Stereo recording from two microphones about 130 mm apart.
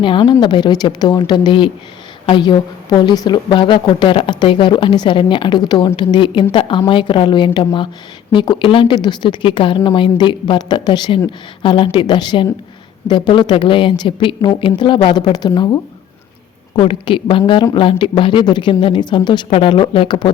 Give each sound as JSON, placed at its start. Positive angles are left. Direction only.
{"t": 0.0, "sound": "a woman's voice", "side_deg": 35}
{"t": 16.7, "sound": "a woman's voice", "side_deg": 40}
{"t": 19.5, "sound": "a woman's voice", "side_deg": 45}